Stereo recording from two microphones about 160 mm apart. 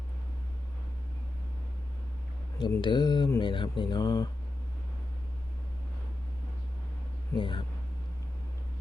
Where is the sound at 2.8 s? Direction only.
30° left (ahead or behind).